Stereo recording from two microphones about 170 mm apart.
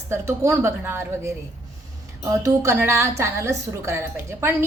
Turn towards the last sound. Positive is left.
turn(degrees=-15)  # may be behind; listen again after turning